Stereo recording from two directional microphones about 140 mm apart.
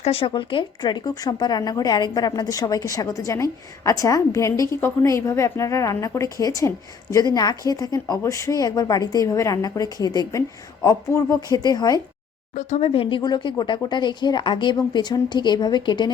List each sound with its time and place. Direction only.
0.0 s speech: 40° left (ahead or behind)
12.5 s speech: 50° left (ahead or behind); by 16.1 s 30° left (ahead or behind)